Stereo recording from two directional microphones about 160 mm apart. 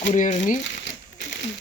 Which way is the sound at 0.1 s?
50° left (ahead or behind).